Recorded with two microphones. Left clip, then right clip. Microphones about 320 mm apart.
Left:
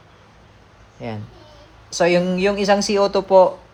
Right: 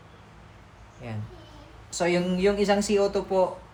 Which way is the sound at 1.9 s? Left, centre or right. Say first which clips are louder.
Left 9 dB; left.